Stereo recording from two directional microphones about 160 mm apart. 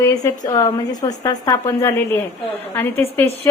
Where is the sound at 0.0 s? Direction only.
20° left (ahead or behind).